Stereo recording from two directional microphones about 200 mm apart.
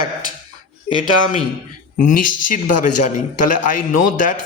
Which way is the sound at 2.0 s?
40° left (ahead or behind).